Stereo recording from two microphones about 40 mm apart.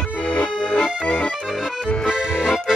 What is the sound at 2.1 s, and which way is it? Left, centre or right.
Accordion, centre.